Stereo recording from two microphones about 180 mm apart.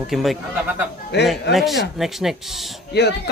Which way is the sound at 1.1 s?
70° left (ahead or behind).